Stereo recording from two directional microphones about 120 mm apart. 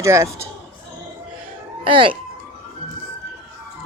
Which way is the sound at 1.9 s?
45° right (ahead or behind).